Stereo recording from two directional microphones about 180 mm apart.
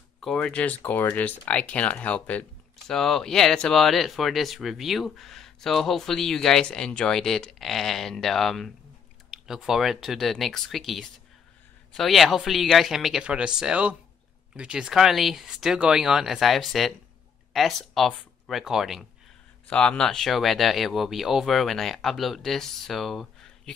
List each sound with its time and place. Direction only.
0.2 s speech: 5° left (ahead or behind)